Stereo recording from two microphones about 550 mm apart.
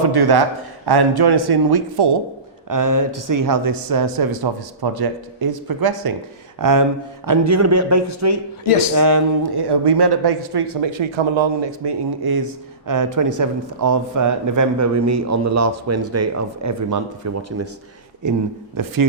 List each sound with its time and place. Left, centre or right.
0.1 s speech: right